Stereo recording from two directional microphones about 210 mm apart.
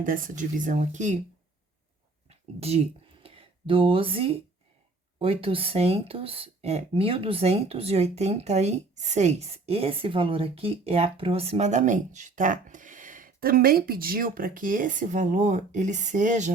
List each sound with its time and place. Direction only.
0.0 s speech: 40° right (ahead or behind)
2.6 s speech: 30° right (ahead or behind)